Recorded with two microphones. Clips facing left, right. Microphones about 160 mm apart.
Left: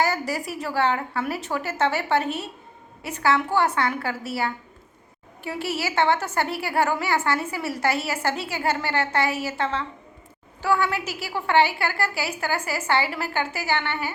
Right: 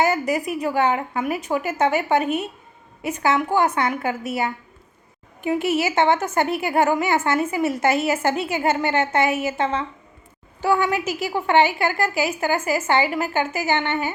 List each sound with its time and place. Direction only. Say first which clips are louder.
0.0 s a woman's voice: right 4 dB; 20° right (ahead or behind)